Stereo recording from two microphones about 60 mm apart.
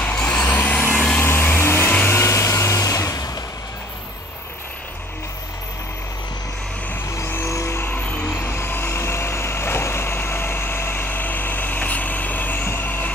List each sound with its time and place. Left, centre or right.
0.0 s vehicle: left
0.6 s vehicle: left
1.2 s vacuum cleaner: left
2.0 s vehicle: left
7.1 s vehicle: left